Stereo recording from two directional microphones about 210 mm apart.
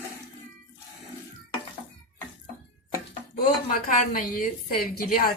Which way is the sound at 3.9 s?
40° left (ahead or behind).